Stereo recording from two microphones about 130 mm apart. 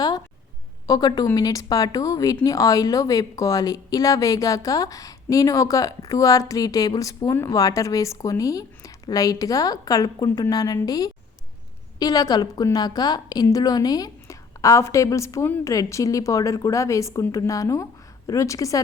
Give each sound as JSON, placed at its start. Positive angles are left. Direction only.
{"t": 0.9, "sound": "speech", "side_deg": 30}